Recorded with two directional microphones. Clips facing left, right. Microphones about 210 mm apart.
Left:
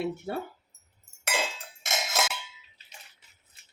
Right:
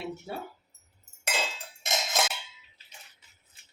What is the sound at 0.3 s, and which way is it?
Speech, 60° left (ahead or behind).